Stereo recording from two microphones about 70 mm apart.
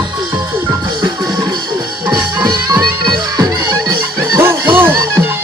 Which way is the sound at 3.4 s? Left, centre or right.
Right.